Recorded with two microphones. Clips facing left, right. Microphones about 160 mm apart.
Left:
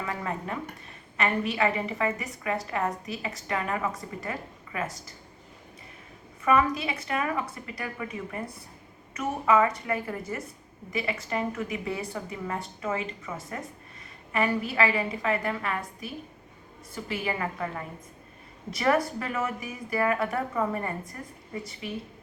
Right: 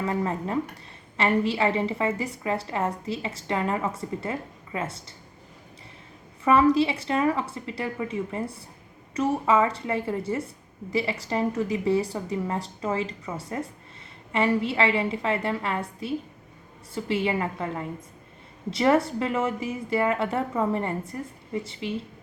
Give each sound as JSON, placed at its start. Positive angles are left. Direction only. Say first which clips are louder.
{"t": 0.1, "sound": "a woman's voice", "louder": "right 6 dB", "side_deg": -30}
{"t": 6.4, "sound": "a woman's voice", "louder": "right 5 dB", "side_deg": -30}